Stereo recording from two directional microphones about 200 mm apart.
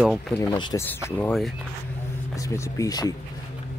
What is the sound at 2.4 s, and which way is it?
Speech, 15° left (ahead or behind).